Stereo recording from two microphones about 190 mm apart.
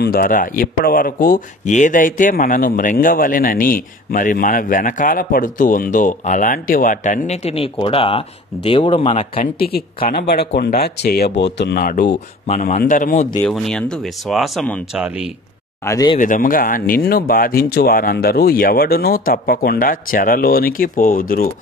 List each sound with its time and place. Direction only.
0.0 s speech: 50° left (ahead or behind); by 9.4 s 30° left (ahead or behind)
9.4 s speech: 55° left (ahead or behind)
12.4 s a man's voice: 40° left (ahead or behind)
13.4 s speech: 5° left (ahead or behind)
15.8 s speech: 20° left (ahead or behind)
16.2 s speech: 45° left (ahead or behind)